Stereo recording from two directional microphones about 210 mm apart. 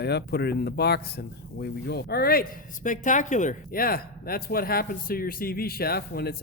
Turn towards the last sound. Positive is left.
turn(degrees=50)  # may be behind; listen again after turning